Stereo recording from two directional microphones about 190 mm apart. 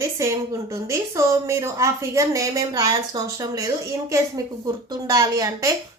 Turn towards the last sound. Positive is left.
turn(degrees=-20)  # may be behind; listen again after turning